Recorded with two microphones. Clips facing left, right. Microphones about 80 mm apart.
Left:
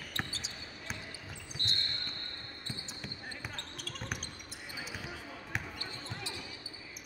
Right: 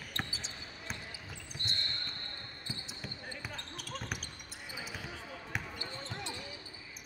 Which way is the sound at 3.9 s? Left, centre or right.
Centre.